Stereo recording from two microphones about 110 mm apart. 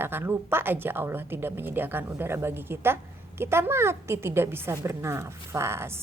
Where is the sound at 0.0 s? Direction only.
20° right (ahead or behind).